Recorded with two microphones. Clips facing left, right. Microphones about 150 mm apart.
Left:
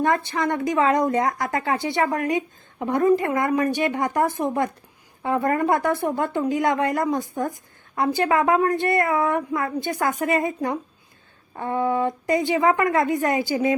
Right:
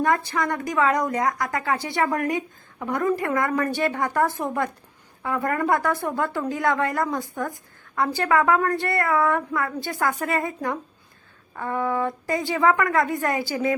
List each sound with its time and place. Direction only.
0.0 s speech: 25° left (ahead or behind)